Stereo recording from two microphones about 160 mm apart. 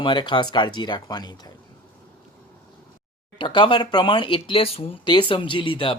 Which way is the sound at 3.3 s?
30° left (ahead or behind).